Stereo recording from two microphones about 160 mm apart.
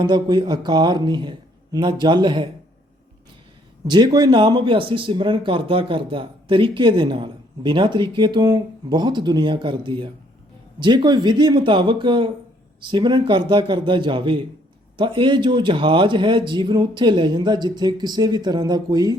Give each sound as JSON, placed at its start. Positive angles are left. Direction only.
{"t": 0.0, "sound": "speech", "side_deg": -30}
{"t": 3.8, "sound": "speech", "side_deg": -25}